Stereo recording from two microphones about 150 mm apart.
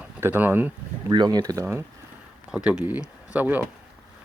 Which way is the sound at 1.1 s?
30° right (ahead or behind).